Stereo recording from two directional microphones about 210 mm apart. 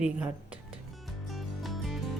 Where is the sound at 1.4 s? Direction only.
Centre (ahead or behind).